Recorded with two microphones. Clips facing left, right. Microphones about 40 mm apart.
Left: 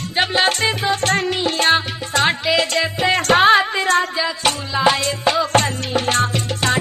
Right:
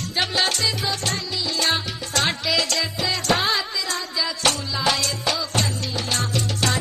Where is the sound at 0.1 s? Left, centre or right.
Left.